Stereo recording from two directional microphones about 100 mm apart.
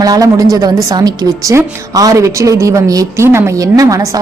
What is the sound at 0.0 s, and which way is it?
A woman's voice, 35° right (ahead or behind).